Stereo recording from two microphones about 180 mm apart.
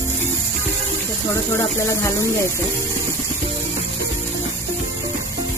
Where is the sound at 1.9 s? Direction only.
15° left (ahead or behind).